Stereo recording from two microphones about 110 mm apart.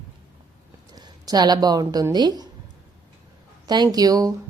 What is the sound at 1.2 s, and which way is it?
A woman's voice, 35° right (ahead or behind).